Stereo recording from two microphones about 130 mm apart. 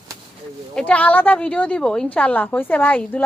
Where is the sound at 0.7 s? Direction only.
10° left (ahead or behind).